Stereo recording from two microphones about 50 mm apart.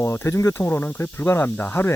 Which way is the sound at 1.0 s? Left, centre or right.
Left.